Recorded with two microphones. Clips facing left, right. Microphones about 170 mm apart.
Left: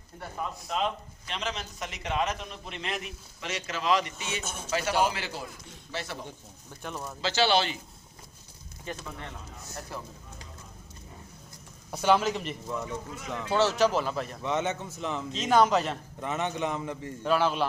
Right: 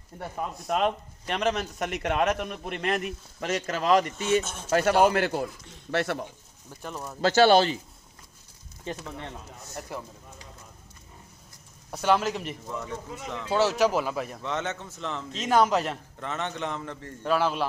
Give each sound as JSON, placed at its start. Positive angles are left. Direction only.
{"t": 0.7, "sound": "a man's voice", "side_deg": -55}
{"t": 4.4, "sound": "a man's voice", "side_deg": 0}
{"t": 4.6, "sound": "a man's voice", "side_deg": -55}
{"t": 6.8, "sound": "a man's voice", "side_deg": -5}
{"t": 7.2, "sound": "speech", "side_deg": -50}
{"t": 8.9, "sound": "speech", "side_deg": -25}
{"t": 9.9, "sound": "speech", "side_deg": -15}
{"t": 11.9, "sound": "a man's voice", "side_deg": 0}
{"t": 14.4, "sound": "a man's voice", "side_deg": 15}
{"t": 15.3, "sound": "a man's voice", "side_deg": -5}
{"t": 16.2, "sound": "a man's voice", "side_deg": 10}
{"t": 17.2, "sound": "a man's voice", "side_deg": 0}